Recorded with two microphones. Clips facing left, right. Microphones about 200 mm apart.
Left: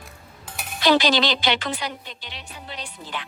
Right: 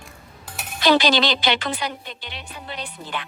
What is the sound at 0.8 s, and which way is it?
A woman's voice, 60° right (ahead or behind).